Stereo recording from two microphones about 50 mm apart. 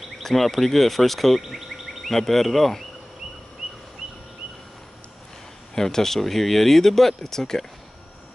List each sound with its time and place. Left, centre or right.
0.2 s speech: centre
5.8 s speech: centre